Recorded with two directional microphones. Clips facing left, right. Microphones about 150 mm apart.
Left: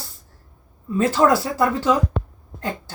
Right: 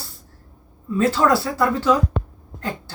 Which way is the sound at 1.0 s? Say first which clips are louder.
Left 1 dB; 20° left (ahead or behind).